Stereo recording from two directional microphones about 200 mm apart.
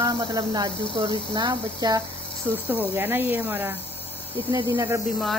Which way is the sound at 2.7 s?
10° right (ahead or behind).